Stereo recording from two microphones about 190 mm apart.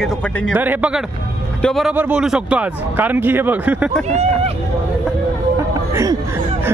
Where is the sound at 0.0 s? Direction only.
5° left (ahead or behind).